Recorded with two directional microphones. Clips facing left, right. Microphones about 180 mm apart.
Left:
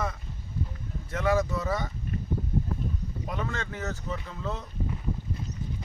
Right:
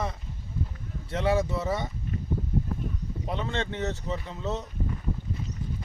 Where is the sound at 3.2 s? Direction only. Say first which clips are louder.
Right 3 dB; 25° right (ahead or behind).